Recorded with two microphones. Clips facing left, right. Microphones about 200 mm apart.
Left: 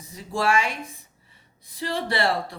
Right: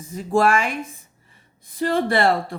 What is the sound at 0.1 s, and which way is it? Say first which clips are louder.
Speech: right 5 dB; 50° right (ahead or behind).